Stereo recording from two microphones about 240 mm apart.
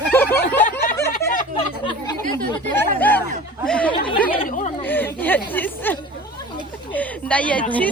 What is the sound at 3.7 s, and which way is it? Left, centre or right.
Speech, centre.